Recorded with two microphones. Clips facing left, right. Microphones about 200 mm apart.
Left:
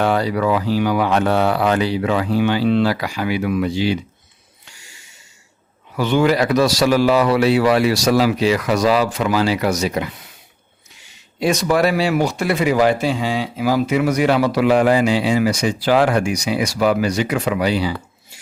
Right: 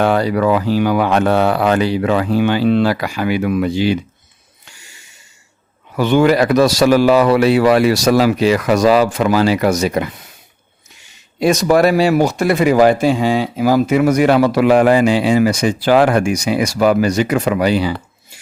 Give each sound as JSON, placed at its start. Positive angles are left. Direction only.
{"t": 0.0, "sound": "speech", "side_deg": -55}
{"t": 6.0, "sound": "speech", "side_deg": -55}
{"t": 11.3, "sound": "speech", "side_deg": -45}